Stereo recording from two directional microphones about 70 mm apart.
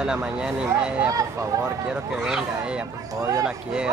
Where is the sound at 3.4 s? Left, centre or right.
Centre.